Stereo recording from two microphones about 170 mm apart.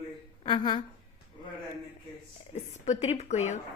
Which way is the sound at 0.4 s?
25° left (ahead or behind).